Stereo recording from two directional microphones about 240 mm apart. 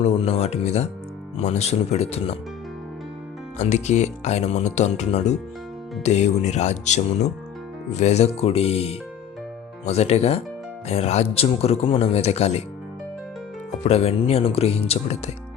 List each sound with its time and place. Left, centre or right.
0.0 s speech: left
3.6 s speech: left
13.8 s speech: left